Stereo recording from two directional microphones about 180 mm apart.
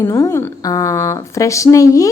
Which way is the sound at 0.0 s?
15° left (ahead or behind).